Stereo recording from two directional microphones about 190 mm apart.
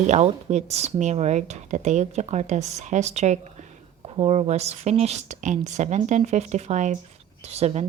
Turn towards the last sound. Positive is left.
turn(degrees=-35)  # may be behind; listen again after turning